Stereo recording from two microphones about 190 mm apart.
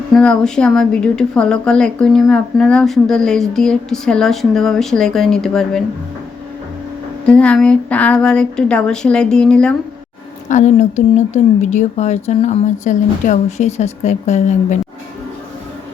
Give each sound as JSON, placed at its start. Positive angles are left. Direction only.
{"t": 0.1, "sound": "speech", "side_deg": 5}
{"t": 7.3, "sound": "speech", "side_deg": 5}
{"t": 10.5, "sound": "speech", "side_deg": 40}